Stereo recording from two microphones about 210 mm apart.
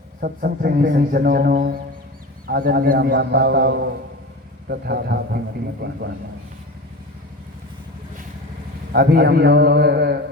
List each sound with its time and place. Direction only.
0.2 s a man's voice: 45° right (ahead or behind)
8.9 s a man's voice: 50° right (ahead or behind)